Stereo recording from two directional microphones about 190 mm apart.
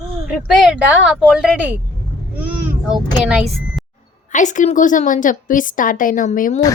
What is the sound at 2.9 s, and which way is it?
Speech, 5° right (ahead or behind).